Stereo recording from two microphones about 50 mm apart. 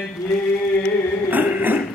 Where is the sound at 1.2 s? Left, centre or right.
Right.